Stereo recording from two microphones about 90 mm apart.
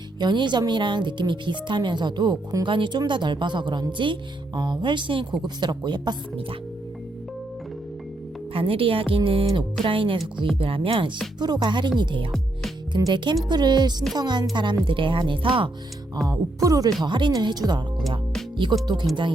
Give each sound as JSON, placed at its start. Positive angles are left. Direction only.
{"t": 0.2, "sound": "speech", "side_deg": -55}
{"t": 2.6, "sound": "speech", "side_deg": -65}
{"t": 5.4, "sound": "speech", "side_deg": -55}
{"t": 8.5, "sound": "speech", "side_deg": -85}
{"t": 11.3, "sound": "speech", "side_deg": -50}
{"t": 14.8, "sound": "speech", "side_deg": -70}
{"t": 16.2, "sound": "speech", "side_deg": -40}